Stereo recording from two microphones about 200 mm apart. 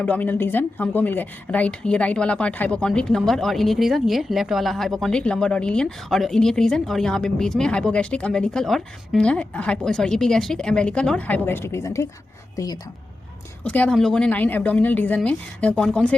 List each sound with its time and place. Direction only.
0.0 s a woman's voice: 10° left (ahead or behind)
13.7 s speech: 5° left (ahead or behind)